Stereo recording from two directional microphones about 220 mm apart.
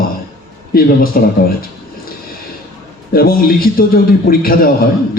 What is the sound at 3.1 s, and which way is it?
A man's voice, 40° left (ahead or behind).